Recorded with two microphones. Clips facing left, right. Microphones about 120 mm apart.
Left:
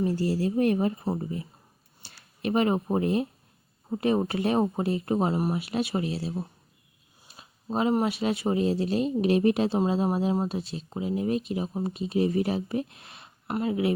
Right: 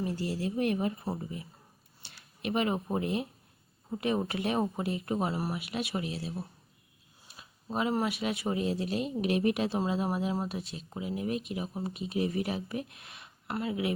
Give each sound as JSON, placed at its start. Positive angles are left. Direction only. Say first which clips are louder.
{"t": 0.0, "sound": "speech", "louder": "left 7 dB", "side_deg": 40}
{"t": 7.3, "sound": "speech", "louder": "left 5 dB", "side_deg": 30}